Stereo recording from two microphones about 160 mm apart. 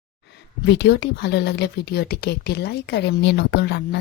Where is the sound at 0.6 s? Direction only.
90° left.